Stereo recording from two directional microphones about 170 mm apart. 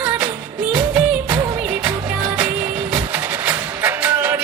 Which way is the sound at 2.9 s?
10° right (ahead or behind).